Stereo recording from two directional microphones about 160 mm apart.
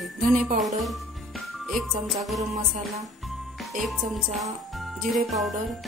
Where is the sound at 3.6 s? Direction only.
Centre (ahead or behind).